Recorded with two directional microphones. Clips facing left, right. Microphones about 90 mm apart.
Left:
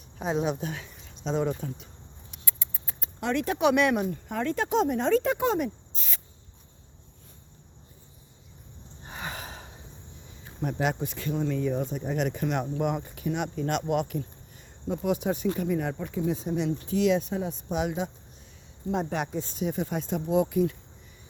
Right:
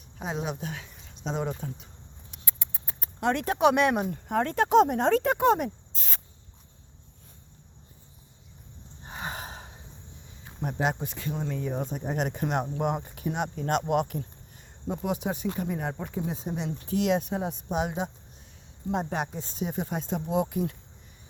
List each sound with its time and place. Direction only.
0.3 s speech: 5° right (ahead or behind)
1.1 s speech: 15° right (ahead or behind)
2.3 s rodents: 30° right (ahead or behind)
3.2 s speech: 50° right (ahead or behind)
9.0 s gasp: 35° right (ahead or behind)
10.6 s speech: 30° right (ahead or behind)
11.9 s speech: 45° right (ahead or behind)
14.8 s speech: 25° right (ahead or behind)
16.9 s speech: 60° right (ahead or behind)
17.7 s speech: 40° right (ahead or behind)
19.1 s speech: 30° right (ahead or behind)